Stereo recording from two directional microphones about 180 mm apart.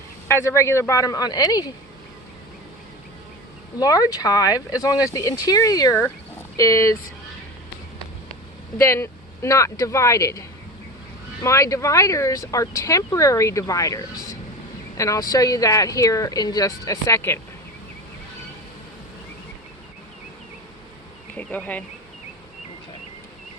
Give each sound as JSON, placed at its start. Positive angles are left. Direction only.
{"t": 0.3, "sound": "speech", "side_deg": 15}
{"t": 3.8, "sound": "speech", "side_deg": 20}
{"t": 8.8, "sound": "speech", "side_deg": 15}
{"t": 11.4, "sound": "speech", "side_deg": 15}
{"t": 21.3, "sound": "speech", "side_deg": 10}